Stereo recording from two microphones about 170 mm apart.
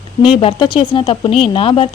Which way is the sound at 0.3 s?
30° left (ahead or behind).